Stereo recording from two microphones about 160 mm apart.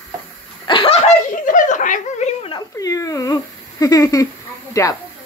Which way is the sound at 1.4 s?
55° left (ahead or behind).